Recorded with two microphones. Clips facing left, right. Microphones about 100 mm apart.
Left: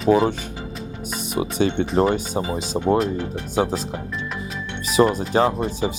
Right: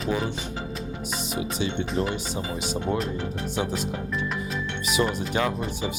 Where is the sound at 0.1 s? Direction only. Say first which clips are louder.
Left 11 dB; 55° left (ahead or behind).